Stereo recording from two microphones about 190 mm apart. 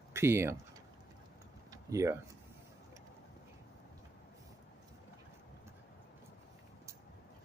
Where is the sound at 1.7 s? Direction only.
15° right (ahead or behind).